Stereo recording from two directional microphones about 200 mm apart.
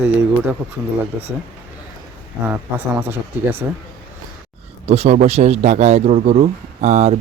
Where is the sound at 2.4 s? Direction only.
10° right (ahead or behind).